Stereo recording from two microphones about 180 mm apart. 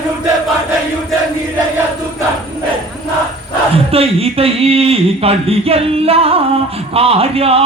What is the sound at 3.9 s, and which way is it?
A man's voice, 35° right (ahead or behind).